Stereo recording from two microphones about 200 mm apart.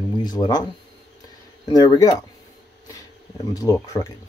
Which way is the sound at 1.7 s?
20° left (ahead or behind).